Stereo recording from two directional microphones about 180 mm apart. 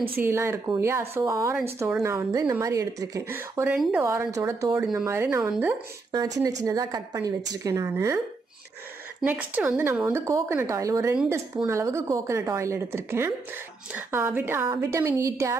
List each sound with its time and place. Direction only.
0.2 s a woman's voice: 15° right (ahead or behind)
4.0 s a woman's voice: 15° right (ahead or behind)
4.7 s a woman's voice: 5° right (ahead or behind)
6.1 s a woman's voice: 20° right (ahead or behind)
9.2 s a woman's voice: 10° right (ahead or behind)